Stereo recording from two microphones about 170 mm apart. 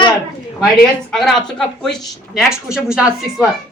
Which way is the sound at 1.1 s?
Centre (ahead or behind).